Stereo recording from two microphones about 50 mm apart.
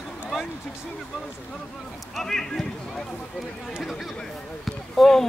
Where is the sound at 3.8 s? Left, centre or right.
Centre.